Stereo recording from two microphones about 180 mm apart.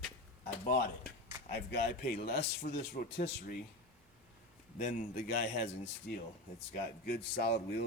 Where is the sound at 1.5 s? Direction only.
65° left (ahead or behind).